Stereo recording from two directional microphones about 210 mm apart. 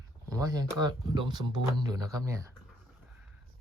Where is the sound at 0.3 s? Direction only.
15° right (ahead or behind).